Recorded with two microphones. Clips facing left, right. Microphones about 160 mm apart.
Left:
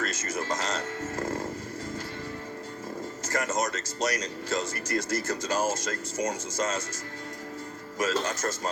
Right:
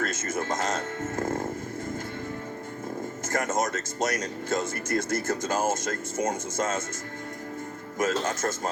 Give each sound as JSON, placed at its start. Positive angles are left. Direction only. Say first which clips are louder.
{"t": 0.0, "sound": "music", "louder": "right 2 dB", "side_deg": -50}
{"t": 3.2, "sound": "speech", "louder": "right 2 dB", "side_deg": -50}
{"t": 7.9, "sound": "speech", "louder": "right 2 dB", "side_deg": -50}